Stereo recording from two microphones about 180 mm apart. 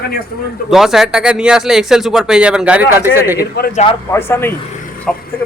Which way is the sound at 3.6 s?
60° left (ahead or behind).